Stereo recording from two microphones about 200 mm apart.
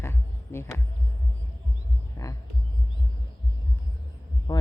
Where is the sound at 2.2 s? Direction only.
15° left (ahead or behind).